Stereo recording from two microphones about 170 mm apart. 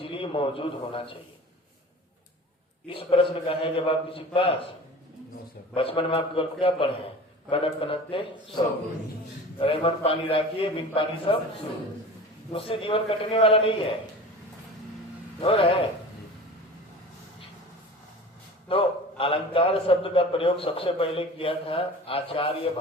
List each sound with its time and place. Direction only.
0.0 s a man's voice: 30° left (ahead or behind)
2.8 s a man's voice: 35° left (ahead or behind)
5.7 s a man's voice: 35° left (ahead or behind)
12.5 s a man's voice: 30° left (ahead or behind)
15.4 s a man's voice: 35° left (ahead or behind)
18.7 s a man's voice: 35° left (ahead or behind)